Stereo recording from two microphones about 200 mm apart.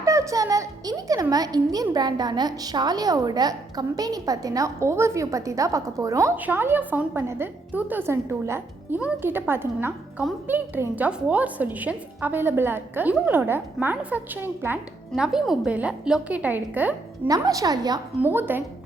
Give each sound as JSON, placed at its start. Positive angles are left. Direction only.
{"t": 0.0, "sound": "a child's voice", "side_deg": -15}